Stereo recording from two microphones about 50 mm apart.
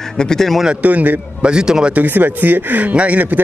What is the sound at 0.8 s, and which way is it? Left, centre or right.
Speech, right.